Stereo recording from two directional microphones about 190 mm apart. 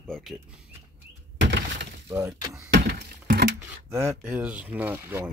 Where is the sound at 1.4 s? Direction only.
70° right (ahead or behind).